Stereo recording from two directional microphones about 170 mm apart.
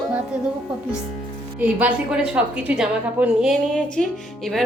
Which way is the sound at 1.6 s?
10° right (ahead or behind).